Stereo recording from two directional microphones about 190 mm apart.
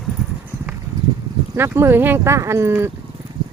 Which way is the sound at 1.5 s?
15° right (ahead or behind).